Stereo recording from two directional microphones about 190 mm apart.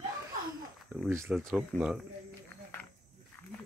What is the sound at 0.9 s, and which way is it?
Speech, 10° right (ahead or behind).